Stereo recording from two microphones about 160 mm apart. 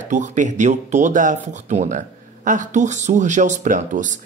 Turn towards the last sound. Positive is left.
turn(degrees=-50)  # may be behind; listen again after turning